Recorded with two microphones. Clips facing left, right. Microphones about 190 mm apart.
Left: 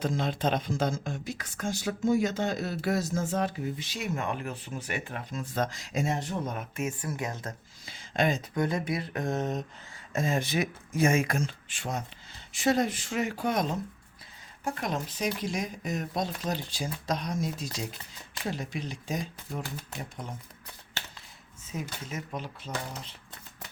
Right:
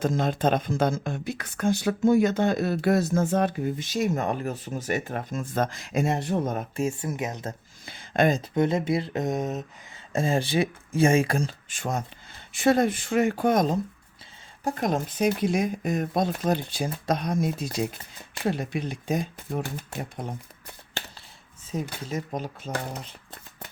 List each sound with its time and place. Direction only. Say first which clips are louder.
0.0 s speech: right 5 dB; 45° right (ahead or behind)
6.6 s speech: right 6 dB; 30° right (ahead or behind)
7.1 s speech: right 4 dB; 20° right (ahead or behind)
7.9 s a sound: right 5 dB; 55° right (ahead or behind)
8.4 s speech: right 5 dB; 25° right (ahead or behind); by 9.6 s 10° right (ahead or behind)
10.1 s speech: right 4 dB; 30° right (ahead or behind); by 19.6 s 55° right (ahead or behind)
21.7 s speech: right 6 dB; 30° right (ahead or behind); by 23.0 s 50° right (ahead or behind)